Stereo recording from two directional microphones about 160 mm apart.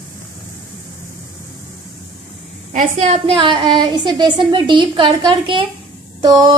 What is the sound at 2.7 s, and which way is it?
A woman's voice, 50° right (ahead or behind).